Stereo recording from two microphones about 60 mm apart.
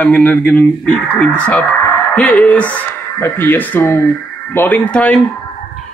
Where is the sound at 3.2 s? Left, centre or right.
Left.